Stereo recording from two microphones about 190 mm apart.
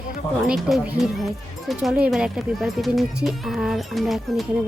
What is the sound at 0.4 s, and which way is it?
Speech, centre (ahead or behind).